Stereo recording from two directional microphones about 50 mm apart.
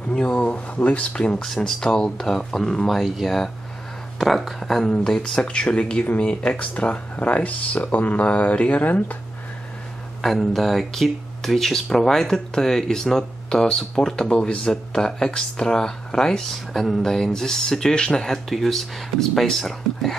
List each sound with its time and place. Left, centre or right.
0.1 s speech: centre
0.4 s speech: left
1.4 s speech: centre
3.0 s speech: centre; by 9.2 s left
10.2 s speech: centre
18.3 s speech: centre